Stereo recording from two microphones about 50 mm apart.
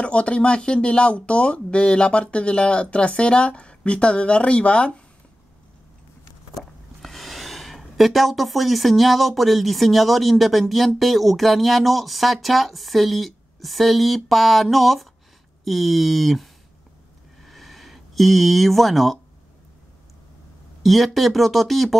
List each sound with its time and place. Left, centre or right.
0.0 s speech: left
6.5 s speech: centre
17.4 s a sound: centre
20.8 s speech: centre